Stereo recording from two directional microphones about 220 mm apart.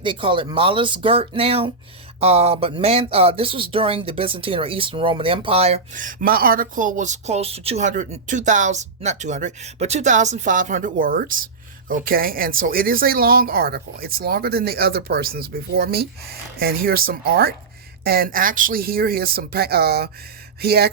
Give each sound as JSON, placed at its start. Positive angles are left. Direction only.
{"t": 0.0, "sound": "speech", "side_deg": -25}